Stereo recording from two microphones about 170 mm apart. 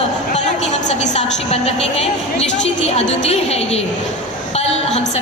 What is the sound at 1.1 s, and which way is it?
A woman's voice, 40° left (ahead or behind).